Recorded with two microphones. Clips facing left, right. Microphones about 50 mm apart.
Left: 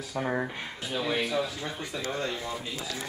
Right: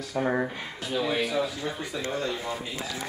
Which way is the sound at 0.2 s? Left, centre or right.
Centre.